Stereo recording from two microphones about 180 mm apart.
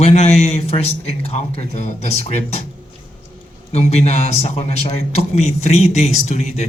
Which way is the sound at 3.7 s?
35° left (ahead or behind).